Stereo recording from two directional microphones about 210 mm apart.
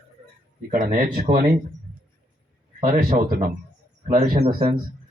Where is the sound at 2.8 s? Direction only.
40° right (ahead or behind).